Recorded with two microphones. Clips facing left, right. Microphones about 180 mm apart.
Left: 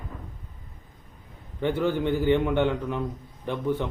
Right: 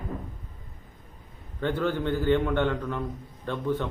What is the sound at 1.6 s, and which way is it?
A man's voice, 15° left (ahead or behind).